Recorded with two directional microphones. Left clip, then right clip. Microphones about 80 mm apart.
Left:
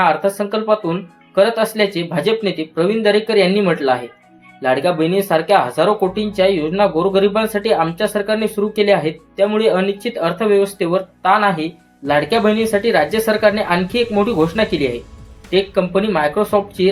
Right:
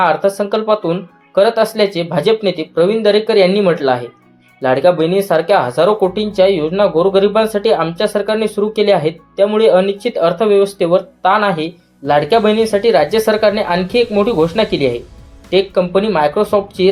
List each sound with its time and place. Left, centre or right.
0.0 s speech: right